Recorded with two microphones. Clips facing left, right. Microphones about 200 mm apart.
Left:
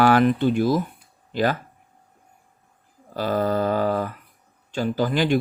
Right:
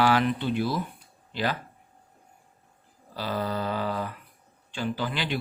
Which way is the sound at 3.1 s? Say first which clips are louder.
Left 8 dB; 50° left (ahead or behind).